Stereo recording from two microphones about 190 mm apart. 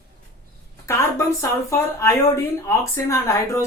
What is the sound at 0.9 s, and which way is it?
Speech, 15° left (ahead or behind).